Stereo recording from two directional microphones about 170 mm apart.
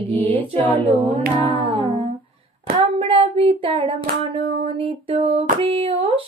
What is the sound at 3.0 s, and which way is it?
Child singing, 35° right (ahead or behind).